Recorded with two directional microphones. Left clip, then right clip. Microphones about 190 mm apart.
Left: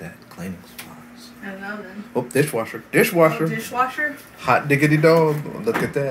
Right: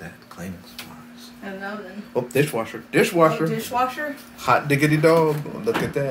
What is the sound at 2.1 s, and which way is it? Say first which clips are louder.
Speech: left 1 dB; centre (ahead or behind).